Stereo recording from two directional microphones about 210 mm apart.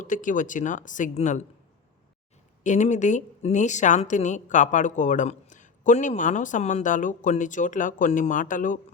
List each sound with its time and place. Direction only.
0.0 s a woman's voice: 40° left (ahead or behind)
2.6 s a woman's voice: 35° left (ahead or behind)